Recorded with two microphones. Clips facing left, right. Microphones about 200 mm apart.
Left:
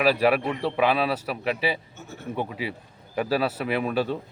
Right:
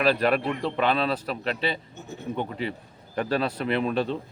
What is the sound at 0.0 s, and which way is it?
Speech, 10° left (ahead or behind).